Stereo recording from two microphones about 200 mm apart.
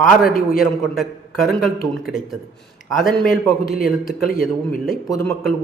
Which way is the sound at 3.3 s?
45° left (ahead or behind).